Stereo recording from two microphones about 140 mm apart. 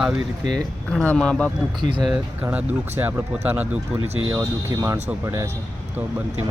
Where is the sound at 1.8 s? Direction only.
35° right (ahead or behind).